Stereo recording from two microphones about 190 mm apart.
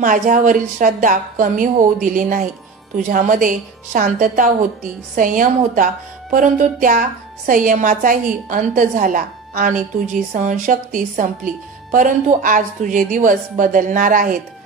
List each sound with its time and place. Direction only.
0.0 s a woman's voice: 45° right (ahead or behind)